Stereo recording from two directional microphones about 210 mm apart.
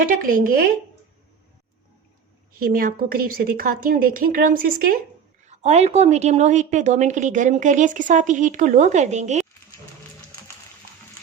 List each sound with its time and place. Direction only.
0.2 s a woman's voice: 40° right (ahead or behind)
2.5 s a woman's voice: 45° right (ahead or behind)
5.5 s a woman's voice: 30° right (ahead or behind)